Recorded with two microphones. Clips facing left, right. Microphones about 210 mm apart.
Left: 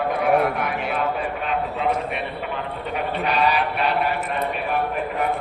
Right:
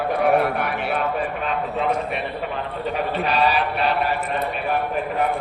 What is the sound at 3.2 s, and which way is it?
Speech, 30° right (ahead or behind).